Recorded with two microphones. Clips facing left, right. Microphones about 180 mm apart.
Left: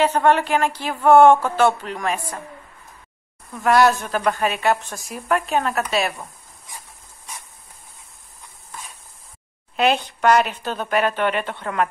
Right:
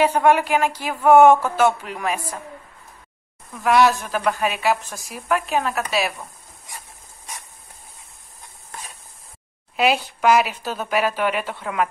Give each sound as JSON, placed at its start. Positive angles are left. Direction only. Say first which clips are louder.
{"t": 0.0, "sound": "speech", "louder": "right 1 dB", "side_deg": -10}
{"t": 3.6, "sound": "a woman's voice", "louder": "left 1 dB", "side_deg": 0}
{"t": 9.8, "sound": "a woman's voice", "louder": "left 1 dB", "side_deg": -5}